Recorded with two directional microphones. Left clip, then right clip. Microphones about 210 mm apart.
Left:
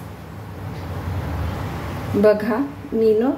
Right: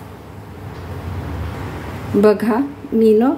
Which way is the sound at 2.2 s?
30° right (ahead or behind).